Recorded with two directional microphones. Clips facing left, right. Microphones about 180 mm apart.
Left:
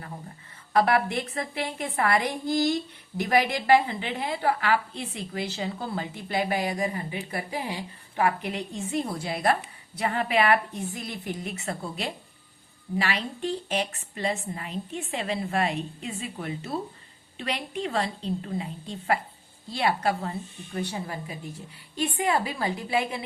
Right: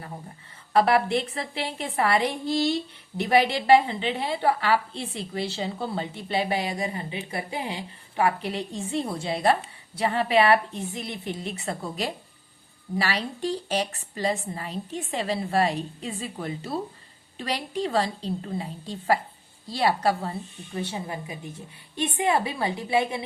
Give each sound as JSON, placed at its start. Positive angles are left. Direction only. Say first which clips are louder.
{"t": 0.7, "sound": "a woman's voice", "louder": "right 2 dB", "side_deg": -30}
{"t": 20.8, "sound": "a woman's voice", "louder": "right 1 dB", "side_deg": -20}